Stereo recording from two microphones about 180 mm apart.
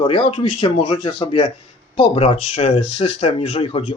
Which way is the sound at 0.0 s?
30° left (ahead or behind).